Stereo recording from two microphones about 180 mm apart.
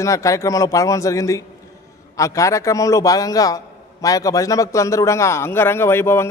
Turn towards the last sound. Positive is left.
turn(degrees=15)  # may be behind; listen again after turning